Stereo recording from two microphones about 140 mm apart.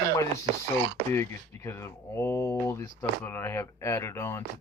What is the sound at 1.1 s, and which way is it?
Speech, 20° left (ahead or behind).